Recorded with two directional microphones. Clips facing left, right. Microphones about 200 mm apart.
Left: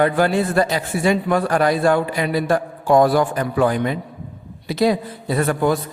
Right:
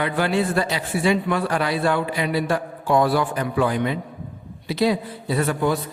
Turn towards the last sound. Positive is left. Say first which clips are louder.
# left 3 dB
turn(degrees=50)  # may be behind; listen again after turning